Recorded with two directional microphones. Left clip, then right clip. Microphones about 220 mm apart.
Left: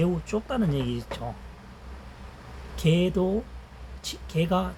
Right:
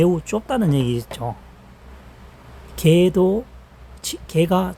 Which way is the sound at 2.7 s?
55° right (ahead or behind).